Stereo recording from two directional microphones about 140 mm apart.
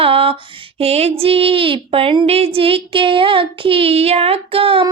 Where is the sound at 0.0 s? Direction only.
40° right (ahead or behind).